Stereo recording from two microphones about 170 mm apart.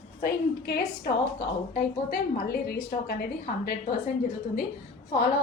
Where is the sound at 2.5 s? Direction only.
65° left (ahead or behind).